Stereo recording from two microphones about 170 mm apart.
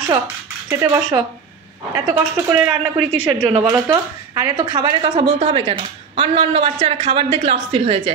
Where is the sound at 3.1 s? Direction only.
10° left (ahead or behind).